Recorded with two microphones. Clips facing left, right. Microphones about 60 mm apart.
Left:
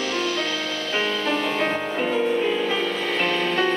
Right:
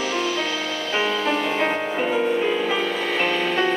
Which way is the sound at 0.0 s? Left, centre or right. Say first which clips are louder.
Right 1 dB; centre.